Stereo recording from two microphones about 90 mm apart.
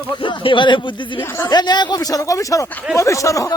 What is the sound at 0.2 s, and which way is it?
Speech, 65° left (ahead or behind).